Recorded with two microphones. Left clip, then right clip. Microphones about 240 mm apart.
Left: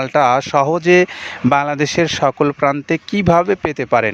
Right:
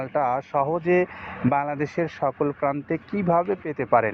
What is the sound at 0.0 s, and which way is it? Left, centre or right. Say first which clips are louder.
Speech: left 10 dB; left.